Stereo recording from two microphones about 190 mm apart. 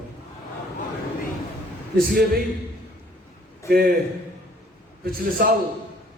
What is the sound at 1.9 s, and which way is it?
Speech, 50° right (ahead or behind).